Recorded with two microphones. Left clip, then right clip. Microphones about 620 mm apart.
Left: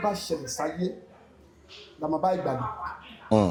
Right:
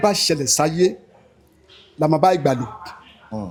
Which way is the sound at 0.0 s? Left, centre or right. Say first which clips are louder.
Right 10 dB; right.